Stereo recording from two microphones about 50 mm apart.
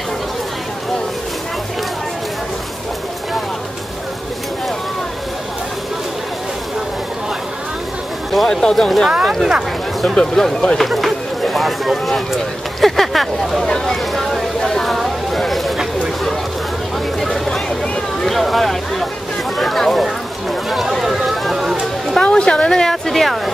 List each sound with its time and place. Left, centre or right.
8.5 s speech: centre
10.0 s speech: centre
10.8 s run: centre
12.8 s speech: centre
14.6 s a sound: centre
17.2 s vehicle: centre
18.2 s speech: centre
21.0 s a sound: centre
22.2 s speech: centre